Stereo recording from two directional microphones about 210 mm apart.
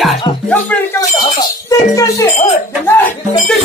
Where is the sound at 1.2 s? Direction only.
20° left (ahead or behind).